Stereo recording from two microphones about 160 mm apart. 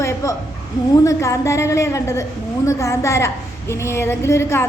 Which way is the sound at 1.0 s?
20° left (ahead or behind).